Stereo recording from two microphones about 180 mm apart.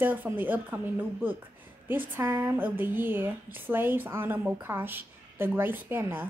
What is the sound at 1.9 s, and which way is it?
A woman's voice, 10° right (ahead or behind).